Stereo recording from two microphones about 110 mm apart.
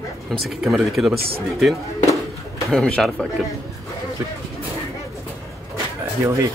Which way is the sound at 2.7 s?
5° left (ahead or behind).